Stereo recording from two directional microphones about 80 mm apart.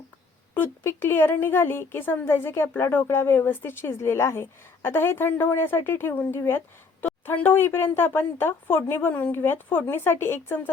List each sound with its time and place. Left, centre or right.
0.5 s a woman's voice: left
7.0 s a sound: left
7.4 s a woman's voice: left